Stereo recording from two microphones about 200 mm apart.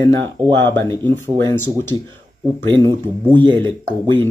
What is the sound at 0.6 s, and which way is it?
A man's voice, 10° left (ahead or behind).